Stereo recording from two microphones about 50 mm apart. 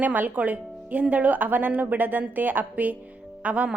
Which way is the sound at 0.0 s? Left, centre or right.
Right.